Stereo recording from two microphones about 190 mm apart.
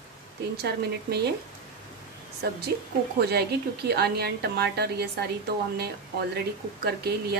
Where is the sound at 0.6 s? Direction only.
60° right (ahead or behind).